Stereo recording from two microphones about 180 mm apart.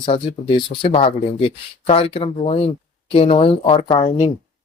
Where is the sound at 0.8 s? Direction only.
30° left (ahead or behind).